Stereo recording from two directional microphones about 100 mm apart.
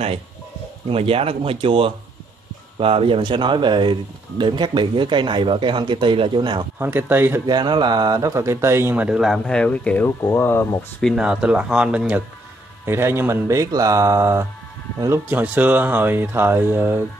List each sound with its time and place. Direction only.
0.8 s speech: 75° right (ahead or behind); by 6.6 s 50° right (ahead or behind)
6.8 s speech: 20° right (ahead or behind)
7.4 s speech: 50° right (ahead or behind); by 9.0 s 25° right (ahead or behind)
9.0 s speech: 5° right (ahead or behind)
9.5 s speech: 10° left (ahead or behind)
10.0 s speech: 25° left (ahead or behind)
11.1 s speech: 10° right (ahead or behind)
12.8 s speech: 25° right (ahead or behind)
15.2 s speech: 20° right (ahead or behind)